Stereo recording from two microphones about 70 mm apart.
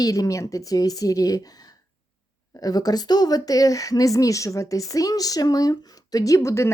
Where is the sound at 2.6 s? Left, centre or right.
Left.